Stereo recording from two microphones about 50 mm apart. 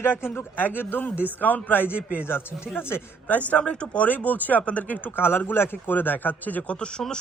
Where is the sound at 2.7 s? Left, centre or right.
Left.